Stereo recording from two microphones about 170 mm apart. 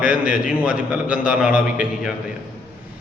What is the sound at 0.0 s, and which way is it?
Speech, 55° left (ahead or behind).